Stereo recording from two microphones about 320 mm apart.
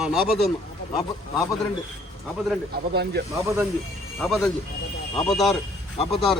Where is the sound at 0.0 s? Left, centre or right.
Centre.